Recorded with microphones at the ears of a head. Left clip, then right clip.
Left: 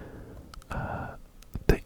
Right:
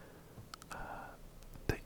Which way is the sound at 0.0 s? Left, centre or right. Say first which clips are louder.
Left 10 dB; left.